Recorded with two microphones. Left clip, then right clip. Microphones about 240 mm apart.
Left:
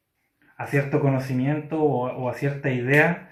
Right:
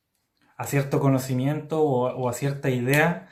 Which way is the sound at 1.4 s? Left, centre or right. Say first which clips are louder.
Left 2 dB; right.